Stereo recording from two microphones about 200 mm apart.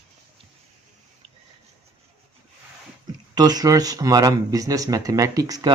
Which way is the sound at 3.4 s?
20° right (ahead or behind).